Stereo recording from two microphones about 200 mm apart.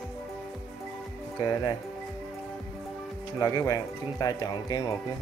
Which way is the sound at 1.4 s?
20° left (ahead or behind).